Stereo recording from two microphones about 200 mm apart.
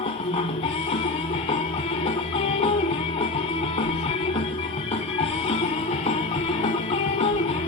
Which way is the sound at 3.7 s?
30° left (ahead or behind).